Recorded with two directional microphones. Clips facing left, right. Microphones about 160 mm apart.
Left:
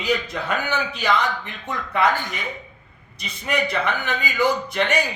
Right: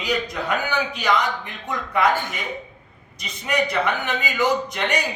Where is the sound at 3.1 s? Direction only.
15° right (ahead or behind).